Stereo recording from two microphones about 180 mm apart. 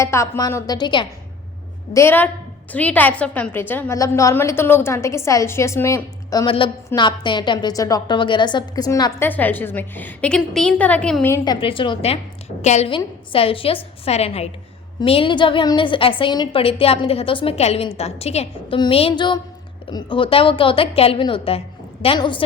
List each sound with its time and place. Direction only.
0.0 s a woman's voice: 15° left (ahead or behind)
1.9 s a woman's voice: 15° left (ahead or behind)
11.4 s a woman's voice: 30° left (ahead or behind)